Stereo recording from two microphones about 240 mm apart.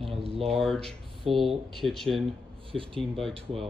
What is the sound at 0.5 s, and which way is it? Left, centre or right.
Speech, centre.